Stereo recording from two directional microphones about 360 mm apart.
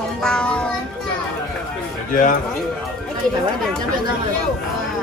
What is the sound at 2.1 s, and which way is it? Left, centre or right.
Speech, left.